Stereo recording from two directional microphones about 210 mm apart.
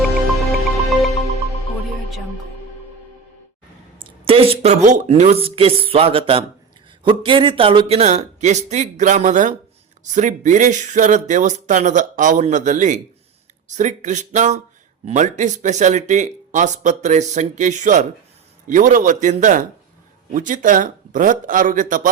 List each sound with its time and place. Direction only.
0.0 s music: centre (ahead or behind)
4.0 s speech: 25° right (ahead or behind)